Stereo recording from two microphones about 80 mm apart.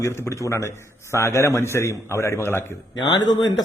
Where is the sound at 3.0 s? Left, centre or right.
Left.